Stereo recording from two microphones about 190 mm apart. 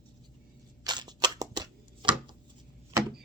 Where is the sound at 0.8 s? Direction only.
20° right (ahead or behind).